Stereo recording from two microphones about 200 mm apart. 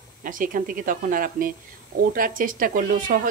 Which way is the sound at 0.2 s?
45° right (ahead or behind).